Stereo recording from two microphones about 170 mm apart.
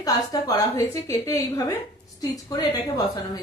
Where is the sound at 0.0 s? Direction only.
20° left (ahead or behind).